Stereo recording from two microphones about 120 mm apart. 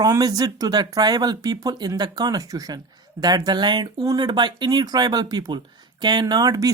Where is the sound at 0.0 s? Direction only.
30° right (ahead or behind).